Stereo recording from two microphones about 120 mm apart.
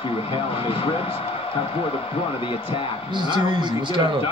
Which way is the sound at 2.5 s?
50° left (ahead or behind).